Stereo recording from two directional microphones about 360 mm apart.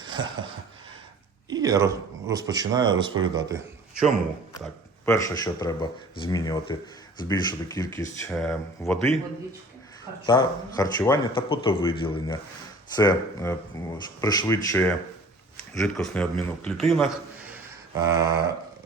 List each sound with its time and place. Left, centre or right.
0.0 s a sound: centre
1.5 s a man's voice: centre
4.6 s speech: centre
10.2 s a man's voice: centre